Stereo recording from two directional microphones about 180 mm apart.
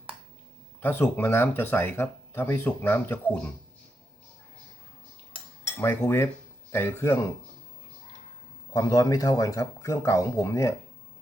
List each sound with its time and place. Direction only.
0.8 s speech: 10° left (ahead or behind)
5.8 s speech: 10° left (ahead or behind)
8.7 s speech: 20° left (ahead or behind)